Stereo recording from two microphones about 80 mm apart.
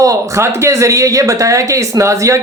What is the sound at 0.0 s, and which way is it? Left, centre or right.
Speech, right.